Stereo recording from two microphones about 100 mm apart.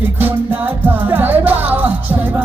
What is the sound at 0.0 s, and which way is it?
Music, 20° right (ahead or behind).